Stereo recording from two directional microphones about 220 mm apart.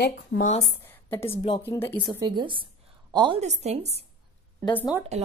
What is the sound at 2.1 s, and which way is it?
A woman's voice, 20° right (ahead or behind).